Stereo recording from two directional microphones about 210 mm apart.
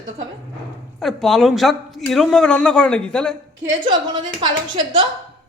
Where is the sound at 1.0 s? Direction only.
Centre (ahead or behind).